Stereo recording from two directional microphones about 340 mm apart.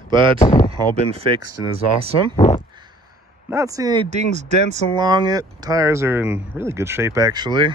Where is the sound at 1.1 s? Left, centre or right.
Centre.